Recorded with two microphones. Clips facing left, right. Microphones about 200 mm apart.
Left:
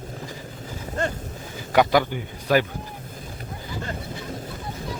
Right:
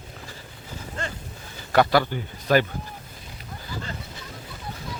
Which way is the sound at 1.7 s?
15° left (ahead or behind).